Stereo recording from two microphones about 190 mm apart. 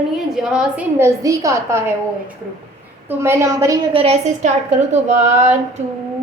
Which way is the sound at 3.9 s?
30° right (ahead or behind).